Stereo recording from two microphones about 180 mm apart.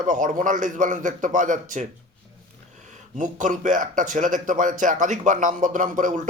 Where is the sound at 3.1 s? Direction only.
45° right (ahead or behind).